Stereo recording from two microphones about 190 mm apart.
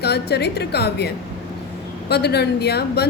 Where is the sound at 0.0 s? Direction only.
60° left (ahead or behind).